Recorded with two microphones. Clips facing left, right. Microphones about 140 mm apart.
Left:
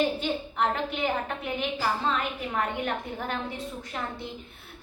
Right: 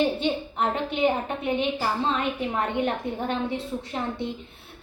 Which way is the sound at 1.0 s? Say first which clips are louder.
Right 8 dB; 25° right (ahead or behind).